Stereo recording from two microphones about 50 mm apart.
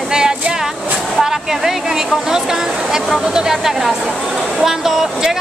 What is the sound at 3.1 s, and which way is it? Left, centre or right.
Speech, centre.